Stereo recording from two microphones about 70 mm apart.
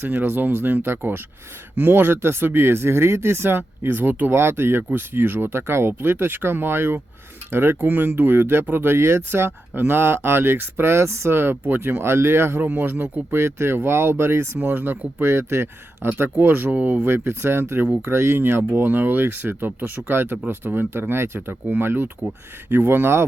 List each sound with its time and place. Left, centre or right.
0.0 s speech: right
4.8 s speech: right
5.1 s speech: right